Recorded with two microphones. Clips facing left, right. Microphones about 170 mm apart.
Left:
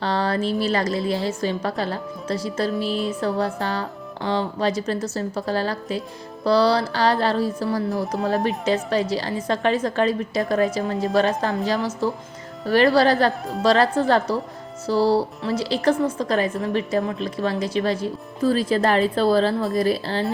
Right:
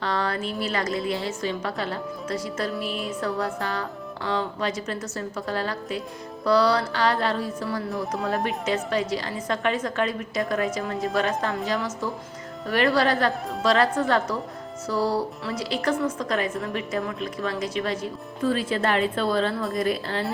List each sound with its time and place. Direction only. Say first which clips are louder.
0.0 s a woman's voice: left 4 dB; 30° left (ahead or behind)